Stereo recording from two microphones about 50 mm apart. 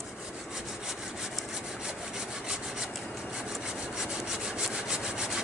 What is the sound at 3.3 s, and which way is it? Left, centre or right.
Sawing, centre.